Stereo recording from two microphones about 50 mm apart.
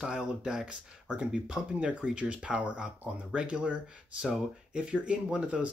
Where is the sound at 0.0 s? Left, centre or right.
Centre.